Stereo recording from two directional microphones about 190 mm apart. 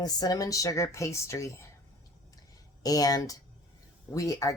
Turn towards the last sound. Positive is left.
turn(degrees=20)  # may be behind; listen again after turning